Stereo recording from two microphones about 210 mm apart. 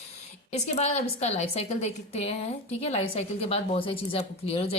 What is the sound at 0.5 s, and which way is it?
A woman's voice, 30° left (ahead or behind).